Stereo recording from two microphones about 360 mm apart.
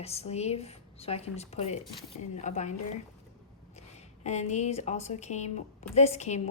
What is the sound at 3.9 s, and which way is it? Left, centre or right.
A woman's voice, centre.